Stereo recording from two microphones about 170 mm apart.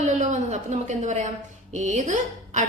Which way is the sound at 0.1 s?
45° right (ahead or behind).